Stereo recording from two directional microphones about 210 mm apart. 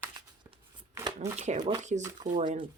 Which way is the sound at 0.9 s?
15° right (ahead or behind).